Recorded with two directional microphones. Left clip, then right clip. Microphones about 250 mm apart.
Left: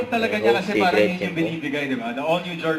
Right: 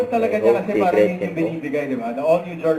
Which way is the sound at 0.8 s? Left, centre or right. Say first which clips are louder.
Right 2 dB; left.